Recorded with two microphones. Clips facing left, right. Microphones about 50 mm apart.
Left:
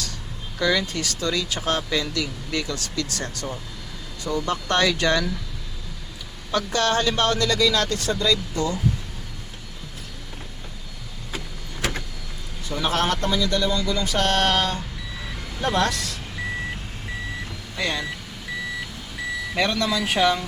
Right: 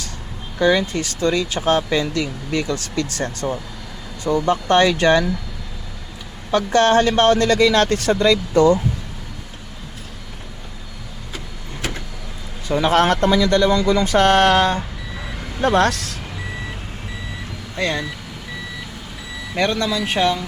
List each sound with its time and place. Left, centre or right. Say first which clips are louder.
0.6 s speech: right 6 dB; right
6.5 s speech: right 7 dB; right
8.2 s a sound: right 11 dB; right
12.6 s speech: right 8 dB; right
13.7 s speech: right 8 dB; right
14.0 s a sound: right 7 dB; right
15.1 s reversing beeps: right 5 dB; centre
15.6 s a sound: right 6 dB; right
17.7 s speech: right 4 dB; right
19.5 s speech: right 4 dB; right